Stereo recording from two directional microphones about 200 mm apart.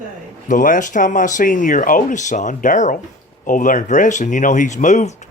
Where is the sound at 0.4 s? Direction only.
40° left (ahead or behind).